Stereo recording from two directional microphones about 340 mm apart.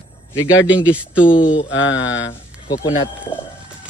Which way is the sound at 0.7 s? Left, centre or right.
Centre.